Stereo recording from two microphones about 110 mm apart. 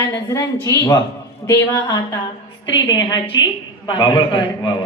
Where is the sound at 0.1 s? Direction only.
30° left (ahead or behind).